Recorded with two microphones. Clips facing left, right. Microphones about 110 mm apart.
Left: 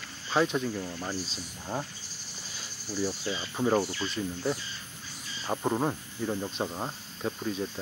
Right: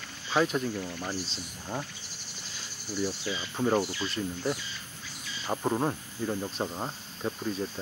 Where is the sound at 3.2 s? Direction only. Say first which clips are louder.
Left 1 dB; 35° left (ahead or behind).